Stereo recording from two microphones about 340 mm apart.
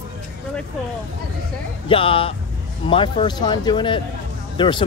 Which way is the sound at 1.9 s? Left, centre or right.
Centre.